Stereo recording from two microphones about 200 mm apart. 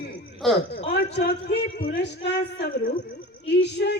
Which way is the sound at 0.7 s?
55° left (ahead or behind).